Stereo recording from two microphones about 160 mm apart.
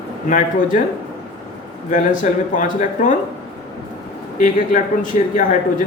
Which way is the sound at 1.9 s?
55° left (ahead or behind).